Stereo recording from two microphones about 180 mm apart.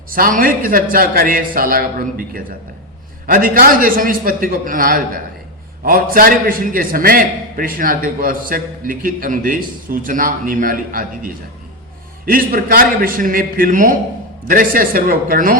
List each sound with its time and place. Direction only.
0.1 s a man's voice: 50° right (ahead or behind)